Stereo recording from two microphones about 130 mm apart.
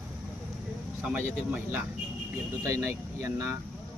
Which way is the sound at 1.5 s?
15° right (ahead or behind).